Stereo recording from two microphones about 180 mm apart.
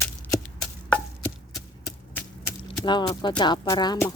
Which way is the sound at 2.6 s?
25° left (ahead or behind).